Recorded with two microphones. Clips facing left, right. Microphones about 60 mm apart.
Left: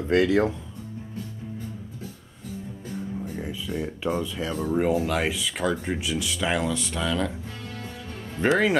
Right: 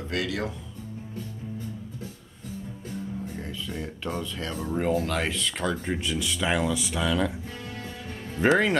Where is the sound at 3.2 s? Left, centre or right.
Centre.